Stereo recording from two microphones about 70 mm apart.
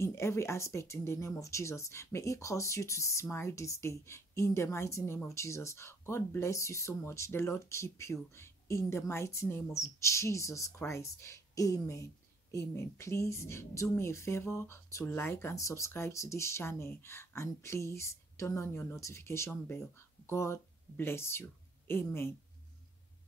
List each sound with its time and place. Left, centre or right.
0.0 s speech: left
15.5 s speech: left